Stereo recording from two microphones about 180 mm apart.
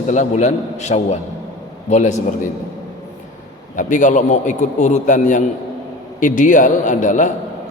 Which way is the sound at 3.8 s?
45° left (ahead or behind).